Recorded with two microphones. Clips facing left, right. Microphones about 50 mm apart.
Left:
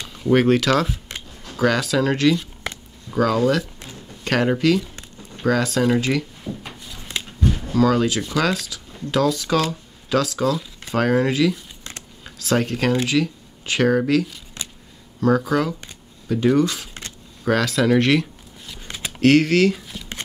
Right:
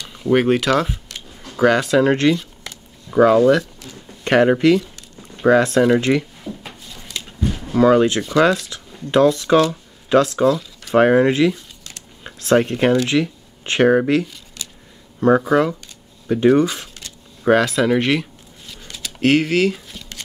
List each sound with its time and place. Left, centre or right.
0.1 s speech: centre
3.1 s a sound: right
3.3 s speech: centre; by 6.2 s right
6.4 s drawer open or close: centre
7.3 s a sound: centre
7.7 s speech: right
12.2 s a sound: right
13.0 s speech: right
15.4 s speech: centre
16.3 s speech: right
16.6 s speech: centre
19.2 s speech: centre